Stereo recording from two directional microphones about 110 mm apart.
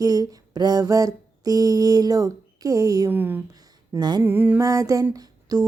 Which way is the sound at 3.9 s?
40° right (ahead or behind).